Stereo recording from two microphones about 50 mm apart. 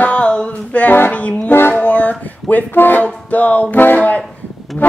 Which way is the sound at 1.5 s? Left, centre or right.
Left.